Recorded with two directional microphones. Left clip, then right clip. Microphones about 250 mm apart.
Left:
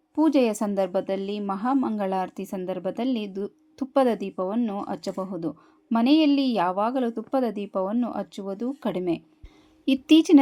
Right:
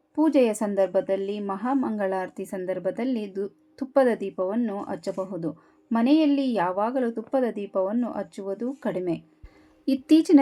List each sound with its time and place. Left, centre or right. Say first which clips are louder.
0.2 s a woman's voice: even; centre